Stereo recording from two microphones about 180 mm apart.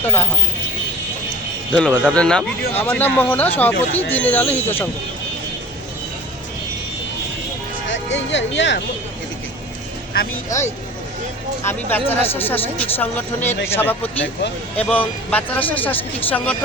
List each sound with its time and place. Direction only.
0.0 s speech: 10° left (ahead or behind)
1.7 s speech: 5° left (ahead or behind)
7.9 s speech: 85° left
11.6 s speech: 10° left (ahead or behind)